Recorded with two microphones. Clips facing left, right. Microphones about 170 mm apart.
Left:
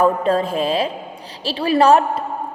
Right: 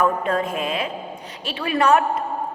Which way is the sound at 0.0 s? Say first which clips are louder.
Left 4 dB; 30° left (ahead or behind).